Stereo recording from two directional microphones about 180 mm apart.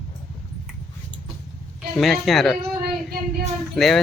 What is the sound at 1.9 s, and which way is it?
Speech, centre (ahead or behind).